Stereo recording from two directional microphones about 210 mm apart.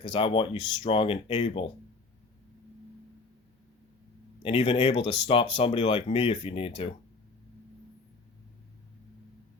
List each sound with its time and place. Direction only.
0.0 s speech: 25° left (ahead or behind)
4.4 s speech: 25° left (ahead or behind)